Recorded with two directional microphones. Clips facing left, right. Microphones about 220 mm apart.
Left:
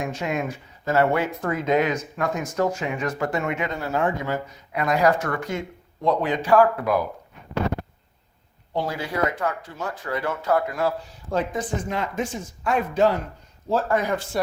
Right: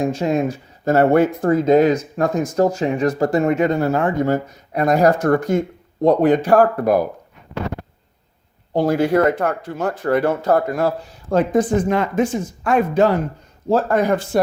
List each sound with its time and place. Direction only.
0.0 s speech: 30° right (ahead or behind)
0.9 s speech: 45° right (ahead or behind)
1.4 s speech: 35° right (ahead or behind)
8.7 s speech: 45° right (ahead or behind)